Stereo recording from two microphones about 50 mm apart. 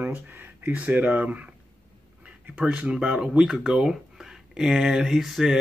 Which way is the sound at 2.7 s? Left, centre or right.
Right.